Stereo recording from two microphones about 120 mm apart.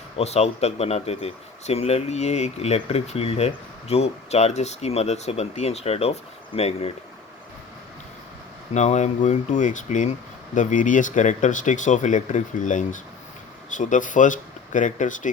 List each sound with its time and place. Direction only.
0.2 s speech: 60° left (ahead or behind)
8.7 s speech: 75° left (ahead or behind)